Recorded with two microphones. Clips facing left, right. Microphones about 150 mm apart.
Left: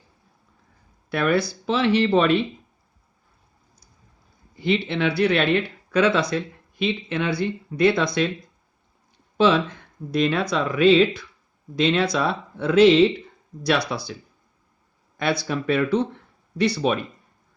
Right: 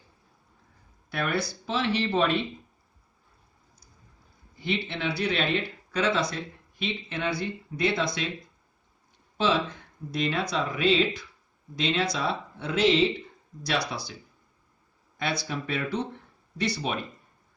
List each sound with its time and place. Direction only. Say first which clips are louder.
1.1 s speech: left 8 dB; 70° left (ahead or behind)
4.6 s speech: left 8 dB; 90° left
7.8 s speech: left 8 dB; 65° left (ahead or behind)
10.1 s speech: left 7 dB; 65° left (ahead or behind)
15.2 s speech: left 7 dB; 70° left (ahead or behind)